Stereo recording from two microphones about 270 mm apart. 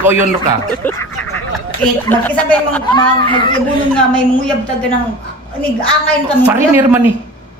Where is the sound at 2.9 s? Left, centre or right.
Centre.